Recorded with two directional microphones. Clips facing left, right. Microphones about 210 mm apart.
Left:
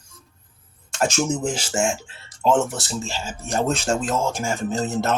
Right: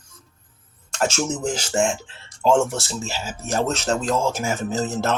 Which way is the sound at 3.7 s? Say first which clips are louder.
Left 1 dB; 10° left (ahead or behind).